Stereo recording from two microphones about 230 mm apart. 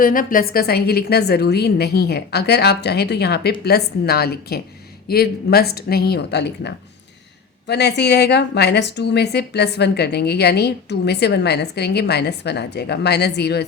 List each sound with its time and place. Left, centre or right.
0.0 s a woman's voice: left